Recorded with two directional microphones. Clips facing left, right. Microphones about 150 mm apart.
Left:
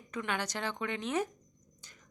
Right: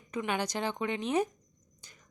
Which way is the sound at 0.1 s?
15° right (ahead or behind).